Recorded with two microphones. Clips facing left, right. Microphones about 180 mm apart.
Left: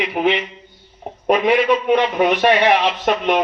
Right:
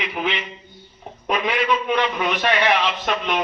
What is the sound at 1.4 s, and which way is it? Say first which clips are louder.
A man's voice: left 5 dB; 60° left (ahead or behind).